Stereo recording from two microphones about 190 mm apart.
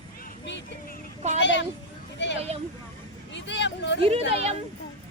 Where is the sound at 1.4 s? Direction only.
70° left (ahead or behind).